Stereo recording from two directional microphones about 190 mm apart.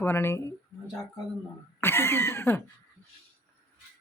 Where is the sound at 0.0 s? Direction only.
10° left (ahead or behind).